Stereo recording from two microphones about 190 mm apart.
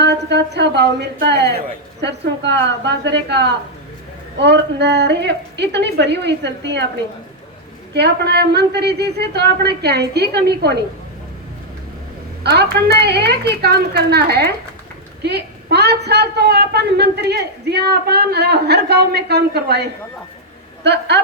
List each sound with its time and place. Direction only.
0.0 s a woman's voice: 60° right (ahead or behind)
7.9 s a woman's voice: 60° right (ahead or behind)
12.4 s a woman's voice: 60° right (ahead or behind)